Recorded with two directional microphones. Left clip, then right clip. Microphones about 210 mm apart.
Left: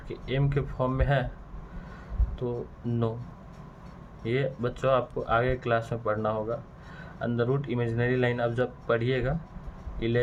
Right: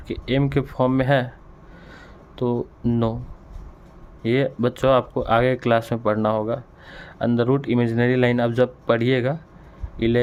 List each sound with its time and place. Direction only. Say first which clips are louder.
0.1 s speech: right 8 dB; 45° right (ahead or behind)
2.4 s speech: right 9 dB; 45° right (ahead or behind)
4.2 s speech: right 8 dB; 50° right (ahead or behind)